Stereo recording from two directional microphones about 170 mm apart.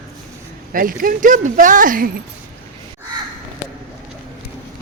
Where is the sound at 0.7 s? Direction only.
55° right (ahead or behind).